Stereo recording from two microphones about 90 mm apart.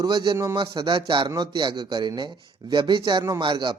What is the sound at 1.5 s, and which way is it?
Speech, 60° right (ahead or behind).